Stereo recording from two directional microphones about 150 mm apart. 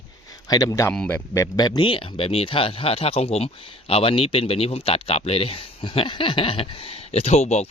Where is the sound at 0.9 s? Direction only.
10° left (ahead or behind).